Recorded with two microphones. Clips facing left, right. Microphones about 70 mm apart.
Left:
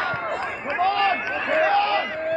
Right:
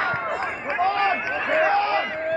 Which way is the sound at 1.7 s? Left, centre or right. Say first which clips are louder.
Left 1 dB; right.